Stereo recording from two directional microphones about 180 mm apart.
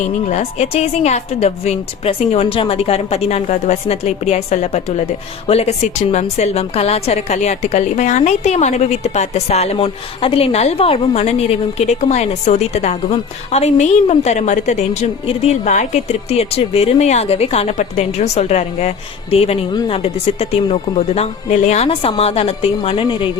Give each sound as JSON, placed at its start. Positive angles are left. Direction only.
{"t": 0.0, "sound": "a woman's voice", "side_deg": 40}